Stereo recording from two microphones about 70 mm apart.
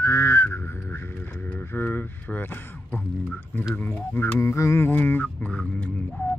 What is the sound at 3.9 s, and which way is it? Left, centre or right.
Didgeridoo, left.